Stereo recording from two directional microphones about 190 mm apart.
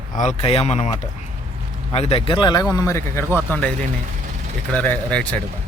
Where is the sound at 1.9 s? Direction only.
30° left (ahead or behind); by 3.7 s 5° left (ahead or behind).